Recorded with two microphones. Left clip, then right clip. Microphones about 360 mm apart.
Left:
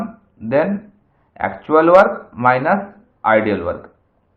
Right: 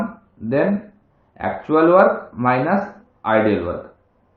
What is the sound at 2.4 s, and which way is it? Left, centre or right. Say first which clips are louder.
Speech: left 6 dB; left.